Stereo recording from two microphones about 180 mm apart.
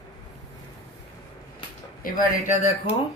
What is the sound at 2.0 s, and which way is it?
Speech, 50° left (ahead or behind).